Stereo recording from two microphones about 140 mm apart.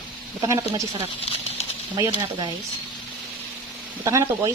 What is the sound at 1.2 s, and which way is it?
Bird flight, 45° left (ahead or behind).